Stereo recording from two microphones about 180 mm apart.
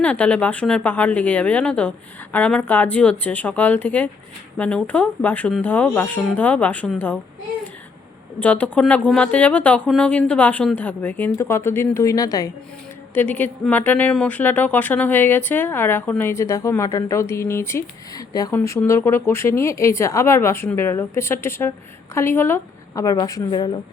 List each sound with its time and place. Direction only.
0.0 s speech: 10° left (ahead or behind)
8.4 s speech: 10° left (ahead or behind)
13.1 s speech: 10° left (ahead or behind); by 23.8 s 25° left (ahead or behind)